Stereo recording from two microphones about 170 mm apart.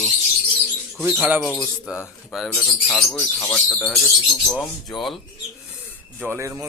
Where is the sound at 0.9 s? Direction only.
5° right (ahead or behind).